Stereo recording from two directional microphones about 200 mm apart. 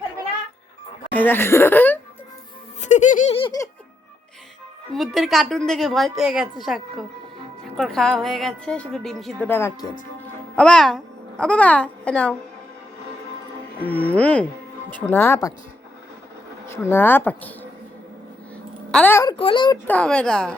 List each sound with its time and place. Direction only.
1.1 s speech: 10° left (ahead or behind)
2.8 s giggle: 35° left (ahead or behind); by 3.7 s 20° left (ahead or behind)
4.9 s a child's voice: centre (ahead or behind)
14.0 s speech: 5° left (ahead or behind)
16.6 s speech: 10° left (ahead or behind)
19.9 s speech: 5° left (ahead or behind)